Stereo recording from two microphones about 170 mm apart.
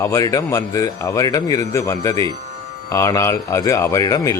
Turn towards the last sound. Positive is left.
turn(degrees=20)  # may be behind; listen again after turning